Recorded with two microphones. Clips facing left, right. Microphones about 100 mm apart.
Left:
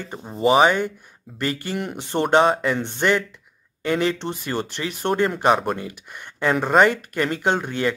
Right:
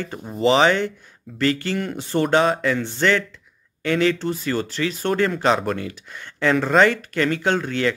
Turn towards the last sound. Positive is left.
turn(degrees=15)  # may be behind; listen again after turning